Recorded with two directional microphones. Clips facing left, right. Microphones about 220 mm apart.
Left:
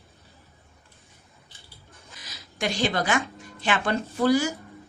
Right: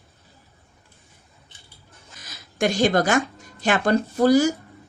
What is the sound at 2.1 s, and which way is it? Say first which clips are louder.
Speech: right 9 dB; 50° right (ahead or behind).